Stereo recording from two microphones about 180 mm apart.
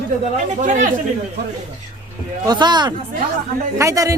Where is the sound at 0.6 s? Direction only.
45° right (ahead or behind).